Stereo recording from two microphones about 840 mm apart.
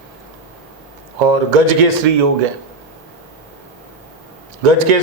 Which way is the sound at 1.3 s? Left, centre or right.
Right.